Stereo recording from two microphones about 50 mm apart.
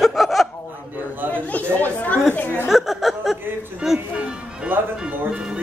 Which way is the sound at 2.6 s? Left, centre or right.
Centre.